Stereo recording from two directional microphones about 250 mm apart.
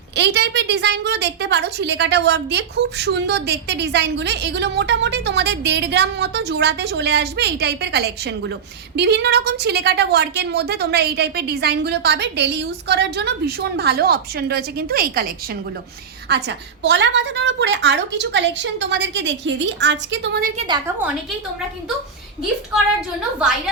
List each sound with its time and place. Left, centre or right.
0.2 s a woman's voice: right
16.3 s a woman's voice: right
20.6 s a woman's voice: centre